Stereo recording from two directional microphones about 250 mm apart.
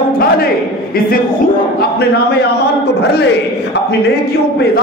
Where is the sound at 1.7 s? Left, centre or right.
Left.